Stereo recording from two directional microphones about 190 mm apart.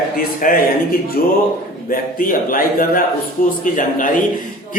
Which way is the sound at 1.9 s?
45° left (ahead or behind).